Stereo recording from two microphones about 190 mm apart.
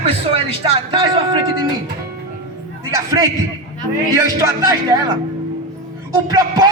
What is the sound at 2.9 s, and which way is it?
Speech, 15° right (ahead or behind).